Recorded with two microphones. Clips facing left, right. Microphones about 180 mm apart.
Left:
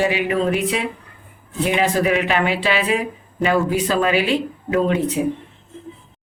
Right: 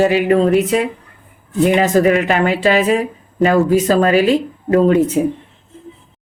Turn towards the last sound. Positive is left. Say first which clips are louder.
# right 7 dB
turn(degrees=-40)  # may be behind; listen again after turning